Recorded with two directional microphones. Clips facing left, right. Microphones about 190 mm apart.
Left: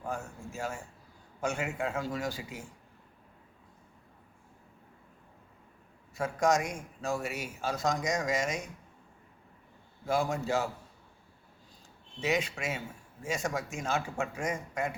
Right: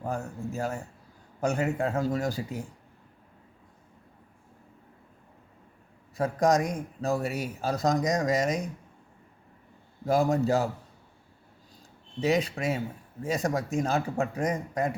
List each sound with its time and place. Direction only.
0.0 s a man's voice: 35° right (ahead or behind)
6.1 s a man's voice: 35° right (ahead or behind)
10.1 s a man's voice: 35° right (ahead or behind)
12.2 s a man's voice: 35° right (ahead or behind)